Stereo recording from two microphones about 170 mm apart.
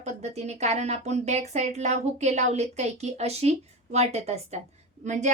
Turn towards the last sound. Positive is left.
turn(degrees=-45)  # may be behind; listen again after turning